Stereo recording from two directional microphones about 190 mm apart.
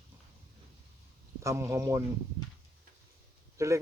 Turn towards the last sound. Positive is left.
turn(degrees=-15)  # may be behind; listen again after turning